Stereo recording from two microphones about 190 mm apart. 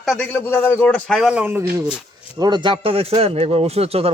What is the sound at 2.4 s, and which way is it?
A man's voice, 20° right (ahead or behind).